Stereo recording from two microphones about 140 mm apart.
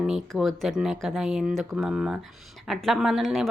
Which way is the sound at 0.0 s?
Centre (ahead or behind).